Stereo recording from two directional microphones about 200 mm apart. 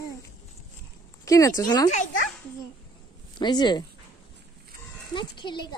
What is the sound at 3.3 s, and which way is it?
Speech, 20° left (ahead or behind).